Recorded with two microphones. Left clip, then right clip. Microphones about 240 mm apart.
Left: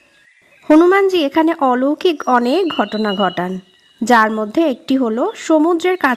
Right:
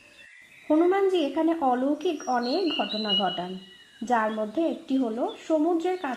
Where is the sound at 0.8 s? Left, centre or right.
Left.